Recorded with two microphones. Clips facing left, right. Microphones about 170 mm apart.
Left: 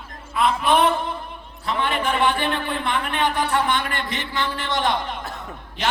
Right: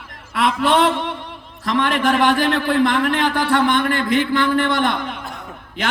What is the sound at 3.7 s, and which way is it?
A man's voice, 55° right (ahead or behind).